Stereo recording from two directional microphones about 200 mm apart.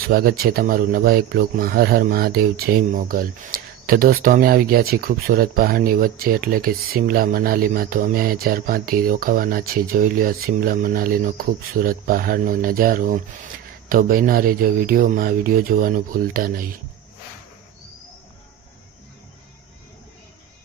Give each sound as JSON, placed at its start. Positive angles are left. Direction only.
{"t": 0.1, "sound": "speech", "side_deg": -50}